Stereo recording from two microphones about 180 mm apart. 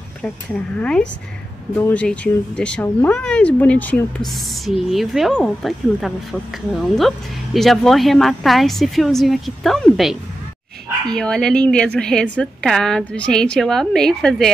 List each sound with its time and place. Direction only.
0.7 s speech: 5° left (ahead or behind)
11.1 s speech: 5° left (ahead or behind)